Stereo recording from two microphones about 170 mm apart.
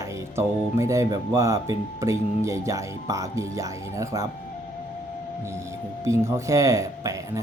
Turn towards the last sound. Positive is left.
turn(degrees=-20)  # may be behind; listen again after turning